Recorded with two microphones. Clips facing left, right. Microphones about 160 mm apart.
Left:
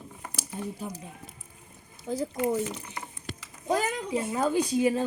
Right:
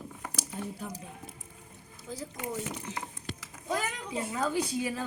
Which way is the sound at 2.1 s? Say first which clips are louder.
Left 10 dB; 50° left (ahead or behind).